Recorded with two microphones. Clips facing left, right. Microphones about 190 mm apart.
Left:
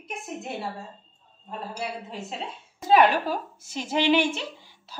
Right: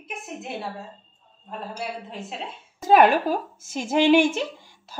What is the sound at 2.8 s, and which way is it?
Speech, 50° right (ahead or behind).